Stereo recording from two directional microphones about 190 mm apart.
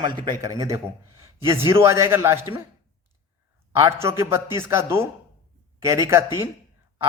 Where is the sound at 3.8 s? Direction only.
15° right (ahead or behind).